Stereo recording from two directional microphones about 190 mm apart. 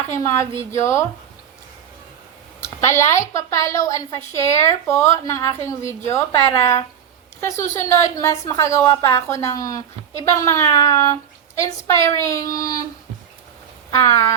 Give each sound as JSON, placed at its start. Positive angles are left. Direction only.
{"t": 0.1, "sound": "a woman's voice", "side_deg": 15}
{"t": 2.6, "sound": "a woman's voice", "side_deg": 15}
{"t": 13.9, "sound": "a woman's voice", "side_deg": 15}